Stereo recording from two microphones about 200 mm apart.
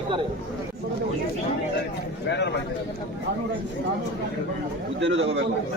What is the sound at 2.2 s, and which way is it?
Speech, 60° left (ahead or behind).